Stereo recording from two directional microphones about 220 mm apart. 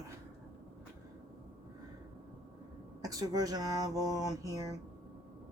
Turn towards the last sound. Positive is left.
turn(degrees=-15)  # may be behind; listen again after turning